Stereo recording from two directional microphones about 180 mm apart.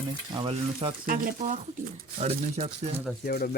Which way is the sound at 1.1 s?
40° right (ahead or behind).